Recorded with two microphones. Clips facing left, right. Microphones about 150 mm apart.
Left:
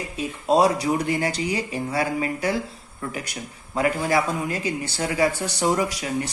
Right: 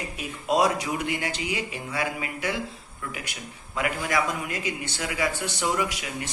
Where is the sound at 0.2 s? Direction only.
30° left (ahead or behind).